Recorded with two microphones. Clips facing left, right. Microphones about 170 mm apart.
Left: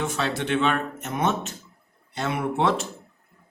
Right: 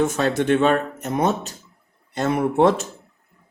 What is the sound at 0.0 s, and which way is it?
Speech, 45° right (ahead or behind).